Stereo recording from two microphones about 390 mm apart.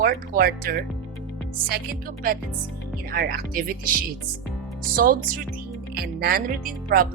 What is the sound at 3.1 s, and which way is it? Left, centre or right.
Speech, right.